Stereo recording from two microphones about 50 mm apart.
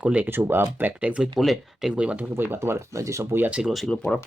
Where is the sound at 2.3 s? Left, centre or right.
Right.